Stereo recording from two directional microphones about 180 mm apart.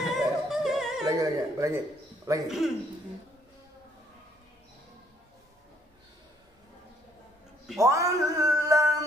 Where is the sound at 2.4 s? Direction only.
Centre (ahead or behind).